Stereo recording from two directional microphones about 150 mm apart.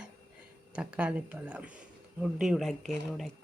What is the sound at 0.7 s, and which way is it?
Speech, 10° right (ahead or behind).